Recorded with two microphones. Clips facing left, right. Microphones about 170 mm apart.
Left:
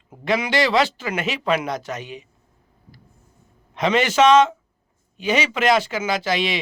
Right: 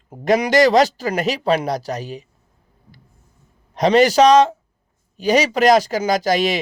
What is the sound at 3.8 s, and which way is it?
A man's voice, 40° right (ahead or behind).